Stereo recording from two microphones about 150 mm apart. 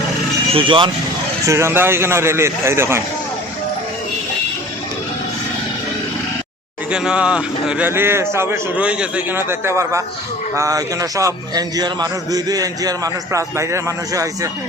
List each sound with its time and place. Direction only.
0.5 s speech: 35° right (ahead or behind)
1.5 s a man's voice: 20° right (ahead or behind)
6.9 s a man's voice: 5° right (ahead or behind); by 14.5 s 20° right (ahead or behind)